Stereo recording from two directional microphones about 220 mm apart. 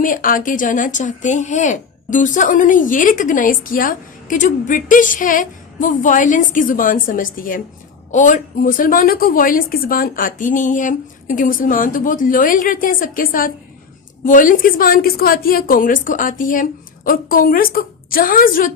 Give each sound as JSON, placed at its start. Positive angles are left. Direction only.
{"t": 0.0, "sound": "speech", "side_deg": 40}